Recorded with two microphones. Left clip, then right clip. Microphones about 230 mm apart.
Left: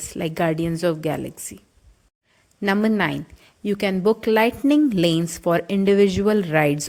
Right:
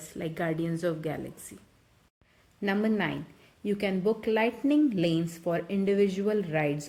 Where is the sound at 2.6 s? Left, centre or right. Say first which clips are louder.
Left 8 dB; left.